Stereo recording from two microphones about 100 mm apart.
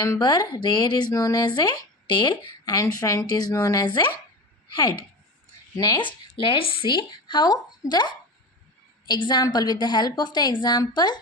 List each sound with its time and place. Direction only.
0.2 s speech: 45° left (ahead or behind)
2.7 s speech: 35° left (ahead or behind)
5.7 s a woman's voice: 40° left (ahead or behind)
6.0 s speech: 55° left (ahead or behind)